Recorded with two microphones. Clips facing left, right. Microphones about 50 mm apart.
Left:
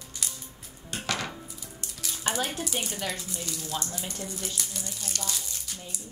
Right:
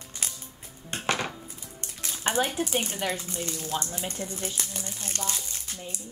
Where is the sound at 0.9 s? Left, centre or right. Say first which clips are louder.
Right 3 dB; right.